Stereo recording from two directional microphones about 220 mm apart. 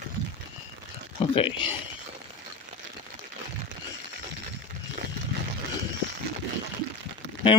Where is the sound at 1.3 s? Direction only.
25° left (ahead or behind).